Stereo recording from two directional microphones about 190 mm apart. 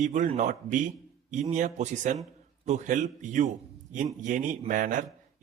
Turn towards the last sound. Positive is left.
turn(degrees=-45)  # may be behind; listen again after turning